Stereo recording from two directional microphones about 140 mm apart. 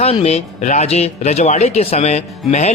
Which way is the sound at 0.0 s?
45° left (ahead or behind).